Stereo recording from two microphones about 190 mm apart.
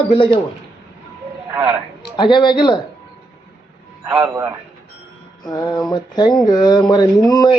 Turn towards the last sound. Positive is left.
turn(degrees=20)  # may be behind; listen again after turning